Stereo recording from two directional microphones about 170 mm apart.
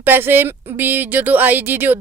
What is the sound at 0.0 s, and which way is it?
Speech, 10° right (ahead or behind).